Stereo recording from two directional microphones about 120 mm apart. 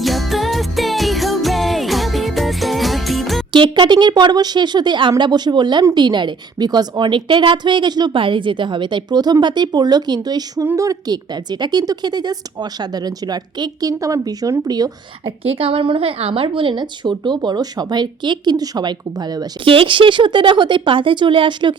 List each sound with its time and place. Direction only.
0.0 s music: centre (ahead or behind)
3.5 s a woman's voice: 40° right (ahead or behind)
15.2 s a woman's voice: 50° right (ahead or behind); by 19.5 s 35° right (ahead or behind)
19.6 s speech: 50° right (ahead or behind)